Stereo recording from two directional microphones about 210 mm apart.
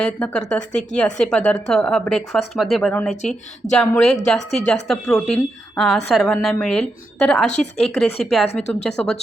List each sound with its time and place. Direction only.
0.0 s a woman's voice: 5° left (ahead or behind)
7.5 s speech: 35° left (ahead or behind)
8.2 s a woman's voice: centre (ahead or behind)